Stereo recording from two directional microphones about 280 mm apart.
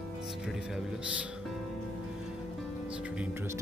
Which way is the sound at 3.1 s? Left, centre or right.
Centre.